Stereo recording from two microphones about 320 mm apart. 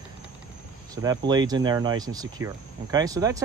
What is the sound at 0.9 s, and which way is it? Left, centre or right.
Speech, centre.